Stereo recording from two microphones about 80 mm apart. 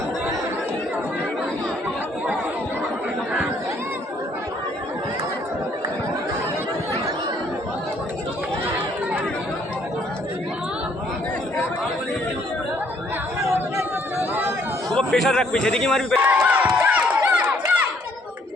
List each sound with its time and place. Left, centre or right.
13.4 s chatter: right
14.9 s a man's voice: centre
16.5 s run: centre